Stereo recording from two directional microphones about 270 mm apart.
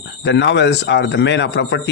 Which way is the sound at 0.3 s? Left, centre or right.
Left.